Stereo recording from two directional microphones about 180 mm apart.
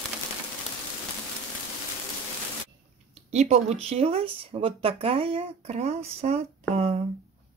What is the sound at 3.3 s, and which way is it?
Speech, 40° right (ahead or behind).